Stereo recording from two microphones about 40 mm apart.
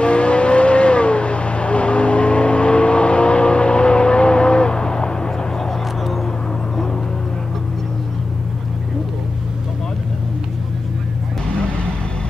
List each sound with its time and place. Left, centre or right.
0.0 s vehicle: left; by 6.1 s centre